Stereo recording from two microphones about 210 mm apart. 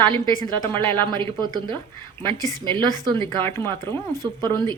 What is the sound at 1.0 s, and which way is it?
Speech, 20° right (ahead or behind).